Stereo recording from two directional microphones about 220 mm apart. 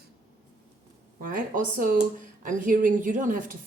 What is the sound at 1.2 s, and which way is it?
A woman's voice, 40° right (ahead or behind).